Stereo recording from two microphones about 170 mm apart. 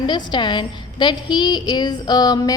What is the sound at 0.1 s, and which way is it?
A woman's voice, 25° left (ahead or behind).